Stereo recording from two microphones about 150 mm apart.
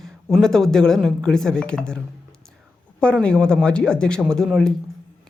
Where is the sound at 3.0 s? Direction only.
5° left (ahead or behind).